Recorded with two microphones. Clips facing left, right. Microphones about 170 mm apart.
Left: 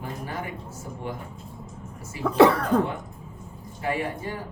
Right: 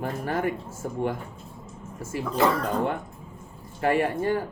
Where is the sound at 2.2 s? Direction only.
70° left (ahead or behind).